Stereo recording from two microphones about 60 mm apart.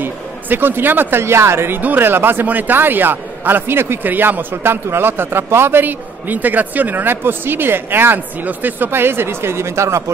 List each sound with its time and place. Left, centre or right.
0.0 s a man's voice: right
1.8 s a man's voice: right